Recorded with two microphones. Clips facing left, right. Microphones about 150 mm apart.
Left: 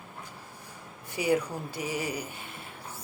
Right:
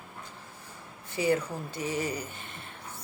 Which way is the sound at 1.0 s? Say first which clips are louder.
Even; 10° left (ahead or behind).